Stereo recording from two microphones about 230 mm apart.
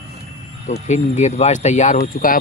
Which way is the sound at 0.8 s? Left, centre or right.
Left.